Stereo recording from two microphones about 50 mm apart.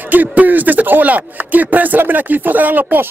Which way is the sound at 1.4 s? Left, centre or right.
Right.